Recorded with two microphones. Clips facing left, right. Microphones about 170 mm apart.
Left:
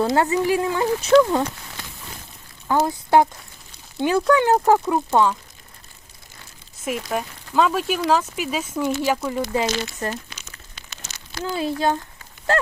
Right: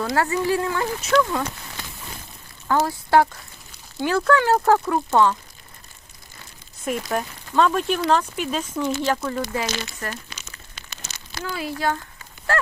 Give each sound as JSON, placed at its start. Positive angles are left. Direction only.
{"t": 0.0, "sound": "speech", "side_deg": 20}
{"t": 1.2, "sound": "speech", "side_deg": 30}
{"t": 2.6, "sound": "speech", "side_deg": 15}
{"t": 6.8, "sound": "speech", "side_deg": 5}
{"t": 9.4, "sound": "speech", "side_deg": 20}
{"t": 11.4, "sound": "speech", "side_deg": 25}